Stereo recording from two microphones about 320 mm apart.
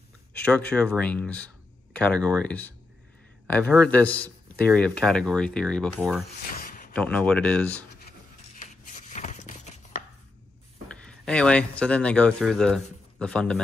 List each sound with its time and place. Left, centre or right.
0.3 s a man's voice: centre
6.6 s a sound: left
6.9 s a man's voice: centre
8.5 s chopping: left
11.1 s a man's voice: centre